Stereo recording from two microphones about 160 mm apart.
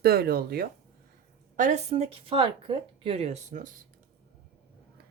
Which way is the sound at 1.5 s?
50° right (ahead or behind).